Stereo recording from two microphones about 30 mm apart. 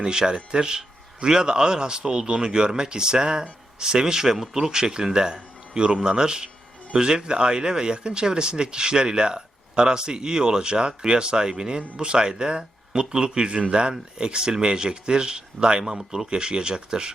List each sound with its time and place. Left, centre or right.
0.0 s speech: right
4.0 s speech: centre
15.8 s speech: centre
16.1 s speech: right